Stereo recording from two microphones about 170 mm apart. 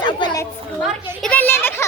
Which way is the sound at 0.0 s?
25° left (ahead or behind).